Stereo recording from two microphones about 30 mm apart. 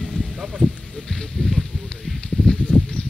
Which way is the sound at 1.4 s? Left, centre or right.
Left.